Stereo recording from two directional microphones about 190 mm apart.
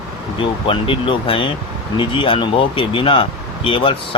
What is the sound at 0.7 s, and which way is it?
Speech, 30° left (ahead or behind).